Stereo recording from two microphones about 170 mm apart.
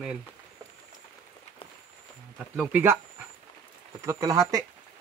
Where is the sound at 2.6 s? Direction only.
10° right (ahead or behind).